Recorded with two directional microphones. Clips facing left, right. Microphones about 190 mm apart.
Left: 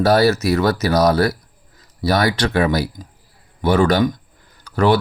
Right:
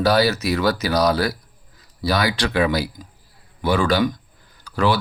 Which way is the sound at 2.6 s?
45° left (ahead or behind).